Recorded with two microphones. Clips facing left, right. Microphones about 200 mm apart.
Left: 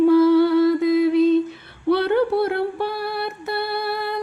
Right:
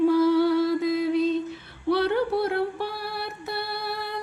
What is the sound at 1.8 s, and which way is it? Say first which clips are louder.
Music: left 5 dB; 60° left (ahead or behind).